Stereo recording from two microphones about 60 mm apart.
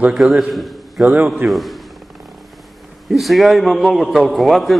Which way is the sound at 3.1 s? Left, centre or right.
Centre.